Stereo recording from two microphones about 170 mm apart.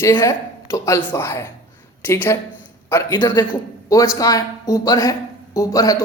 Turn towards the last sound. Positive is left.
turn(degrees=20)  # may be behind; listen again after turning